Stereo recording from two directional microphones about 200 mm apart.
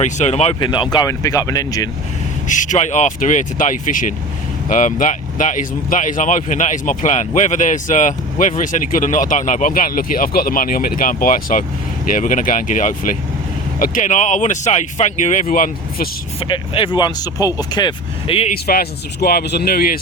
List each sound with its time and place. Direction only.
0.0 s speech: 35° left (ahead or behind); by 1.9 s 20° left (ahead or behind)
2.5 s speech: 40° left (ahead or behind)
16.4 s speech: 25° left (ahead or behind)
18.6 s speech: 50° left (ahead or behind)